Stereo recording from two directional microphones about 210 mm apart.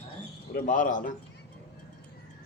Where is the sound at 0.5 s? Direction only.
40° left (ahead or behind).